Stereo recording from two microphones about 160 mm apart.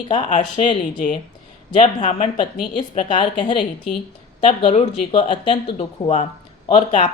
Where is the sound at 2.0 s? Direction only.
40° left (ahead or behind).